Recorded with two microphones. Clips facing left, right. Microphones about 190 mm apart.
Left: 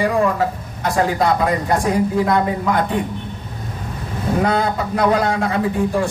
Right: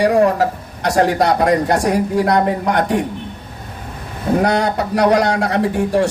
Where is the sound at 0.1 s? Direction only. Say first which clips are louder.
Right 4 dB; 45° right (ahead or behind).